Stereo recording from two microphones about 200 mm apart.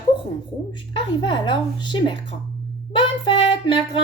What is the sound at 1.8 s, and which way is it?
A woman's voice, 25° left (ahead or behind).